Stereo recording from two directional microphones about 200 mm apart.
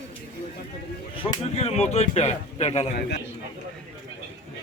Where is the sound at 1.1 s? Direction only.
30° left (ahead or behind).